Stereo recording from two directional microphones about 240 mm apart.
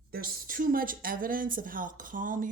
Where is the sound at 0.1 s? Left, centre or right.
Right.